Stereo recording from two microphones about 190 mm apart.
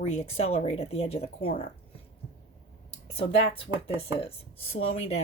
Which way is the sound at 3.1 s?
30° left (ahead or behind).